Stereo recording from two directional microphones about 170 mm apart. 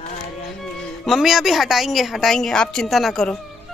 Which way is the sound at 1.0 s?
Centre (ahead or behind).